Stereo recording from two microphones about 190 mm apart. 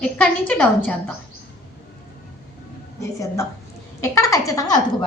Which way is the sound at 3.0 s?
15° left (ahead or behind).